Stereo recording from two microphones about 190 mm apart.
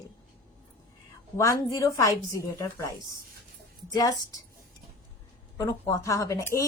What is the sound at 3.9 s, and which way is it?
Speech, 20° left (ahead or behind).